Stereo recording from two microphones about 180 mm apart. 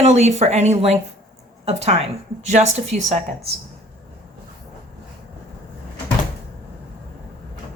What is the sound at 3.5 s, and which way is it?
Speech, 60° right (ahead or behind).